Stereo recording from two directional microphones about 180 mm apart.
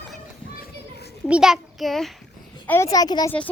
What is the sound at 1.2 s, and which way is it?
Speech, 5° right (ahead or behind).